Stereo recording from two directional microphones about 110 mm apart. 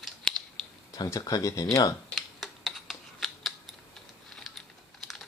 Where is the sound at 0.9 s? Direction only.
30° left (ahead or behind).